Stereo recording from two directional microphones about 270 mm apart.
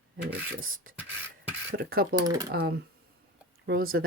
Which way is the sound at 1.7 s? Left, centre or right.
Right.